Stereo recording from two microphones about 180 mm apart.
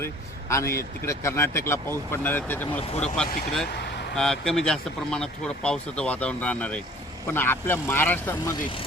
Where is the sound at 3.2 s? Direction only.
55° left (ahead or behind).